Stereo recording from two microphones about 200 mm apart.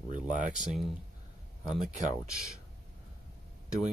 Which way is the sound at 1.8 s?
40° right (ahead or behind).